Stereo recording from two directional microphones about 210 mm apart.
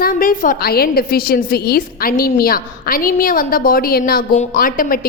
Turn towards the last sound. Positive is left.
turn(degrees=40)  # may be behind; listen again after turning